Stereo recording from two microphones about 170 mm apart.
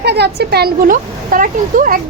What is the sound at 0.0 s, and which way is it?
Speech, 75° right (ahead or behind).